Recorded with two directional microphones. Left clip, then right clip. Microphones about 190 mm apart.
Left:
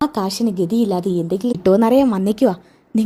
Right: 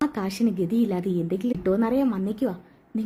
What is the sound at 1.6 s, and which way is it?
A woman's voice, 30° left (ahead or behind).